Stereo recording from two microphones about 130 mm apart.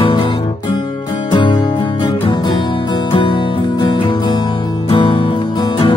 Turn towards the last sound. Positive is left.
turn(degrees=35)  # may be behind; listen again after turning